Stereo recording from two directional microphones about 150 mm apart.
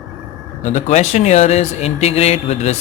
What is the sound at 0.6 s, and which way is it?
Speech, 50° left (ahead or behind).